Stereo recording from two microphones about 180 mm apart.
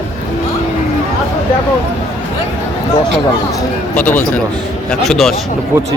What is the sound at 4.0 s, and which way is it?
Speech, 10° left (ahead or behind).